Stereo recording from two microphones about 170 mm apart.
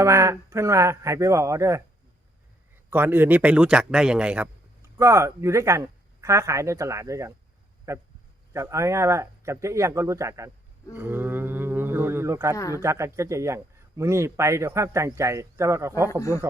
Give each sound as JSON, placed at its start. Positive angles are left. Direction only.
{"t": 0.0, "sound": "speech", "side_deg": -20}
{"t": 2.9, "sound": "speech", "side_deg": -10}